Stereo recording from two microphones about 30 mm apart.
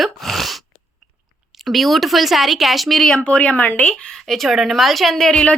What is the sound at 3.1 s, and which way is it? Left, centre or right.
Speech, left.